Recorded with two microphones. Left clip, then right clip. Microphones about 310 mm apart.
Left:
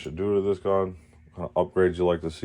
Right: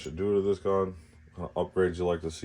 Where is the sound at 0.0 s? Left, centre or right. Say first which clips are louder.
Left 2 dB; centre.